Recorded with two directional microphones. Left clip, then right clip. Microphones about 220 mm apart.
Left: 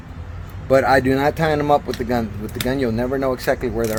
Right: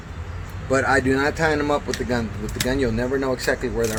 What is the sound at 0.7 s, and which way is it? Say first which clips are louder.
Speech: left 4 dB; 40° left (ahead or behind).